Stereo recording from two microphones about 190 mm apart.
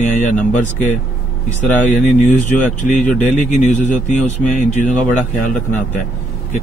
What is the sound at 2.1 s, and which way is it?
Speech, 40° left (ahead or behind).